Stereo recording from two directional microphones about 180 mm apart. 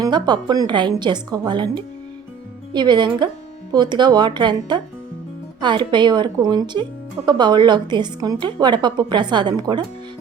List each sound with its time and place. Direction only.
0.0 s a woman's voice: 25° right (ahead or behind)